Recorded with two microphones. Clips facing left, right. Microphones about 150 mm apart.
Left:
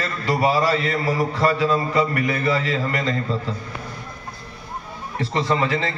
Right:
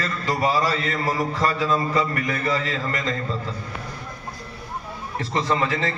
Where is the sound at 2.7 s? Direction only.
35° left (ahead or behind).